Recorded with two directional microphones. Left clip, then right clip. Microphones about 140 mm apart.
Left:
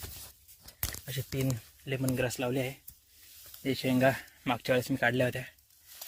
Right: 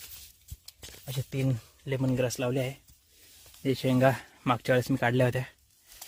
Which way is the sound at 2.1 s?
45° right (ahead or behind).